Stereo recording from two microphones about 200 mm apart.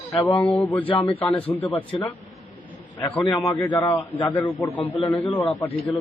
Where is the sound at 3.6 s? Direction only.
10° left (ahead or behind).